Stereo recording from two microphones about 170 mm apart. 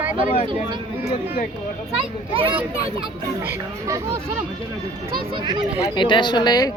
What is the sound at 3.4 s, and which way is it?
Speech, 15° right (ahead or behind).